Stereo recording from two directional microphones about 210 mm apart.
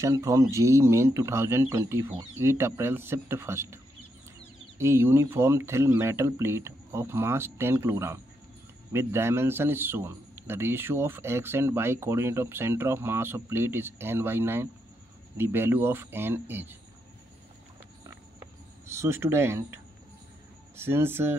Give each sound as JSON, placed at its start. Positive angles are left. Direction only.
{"t": 0.0, "sound": "a man's voice", "side_deg": -15}
{"t": 18.9, "sound": "a man's voice", "side_deg": -10}